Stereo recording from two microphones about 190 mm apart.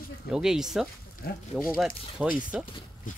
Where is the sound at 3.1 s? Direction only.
45° left (ahead or behind).